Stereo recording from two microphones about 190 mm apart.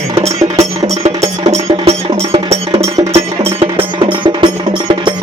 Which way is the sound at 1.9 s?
30° right (ahead or behind).